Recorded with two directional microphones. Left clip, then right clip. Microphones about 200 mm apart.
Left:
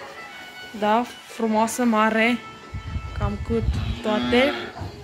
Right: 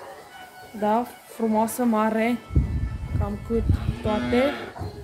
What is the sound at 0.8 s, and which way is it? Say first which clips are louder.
Speech: left 2 dB; 5° right (ahead or behind).